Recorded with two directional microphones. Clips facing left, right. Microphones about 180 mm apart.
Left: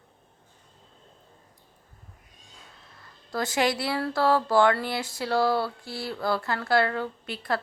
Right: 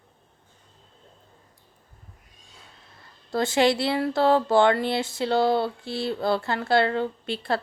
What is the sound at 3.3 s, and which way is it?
Speech, 25° right (ahead or behind).